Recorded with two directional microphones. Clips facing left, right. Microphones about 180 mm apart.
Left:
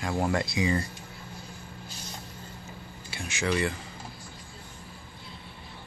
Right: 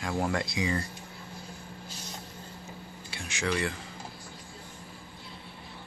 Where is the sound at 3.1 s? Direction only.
5° left (ahead or behind).